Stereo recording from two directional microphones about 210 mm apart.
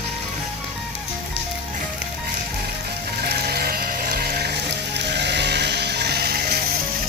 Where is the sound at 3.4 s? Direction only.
45° right (ahead or behind).